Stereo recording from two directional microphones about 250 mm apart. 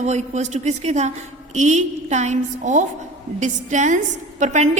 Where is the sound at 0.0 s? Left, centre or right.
Right.